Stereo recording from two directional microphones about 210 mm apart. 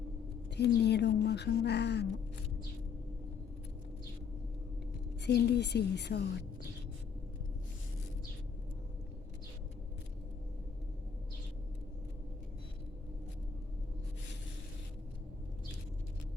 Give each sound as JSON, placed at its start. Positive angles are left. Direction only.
{"t": 0.5, "sound": "speech", "side_deg": 55}
{"t": 5.2, "sound": "speech", "side_deg": 50}